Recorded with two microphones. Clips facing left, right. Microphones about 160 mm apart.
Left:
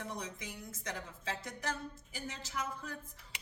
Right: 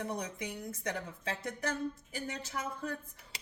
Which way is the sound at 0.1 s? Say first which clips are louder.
Right 5 dB; 60° right (ahead or behind).